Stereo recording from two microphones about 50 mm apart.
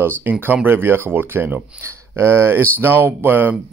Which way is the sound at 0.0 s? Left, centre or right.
Right.